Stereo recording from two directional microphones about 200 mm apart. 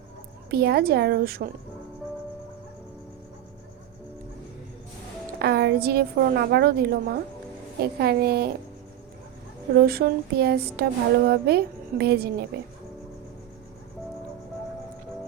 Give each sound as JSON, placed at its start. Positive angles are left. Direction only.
{"t": 0.5, "sound": "a woman's voice", "side_deg": -50}
{"t": 5.4, "sound": "a woman's voice", "side_deg": -55}
{"t": 9.8, "sound": "a woman's voice", "side_deg": -50}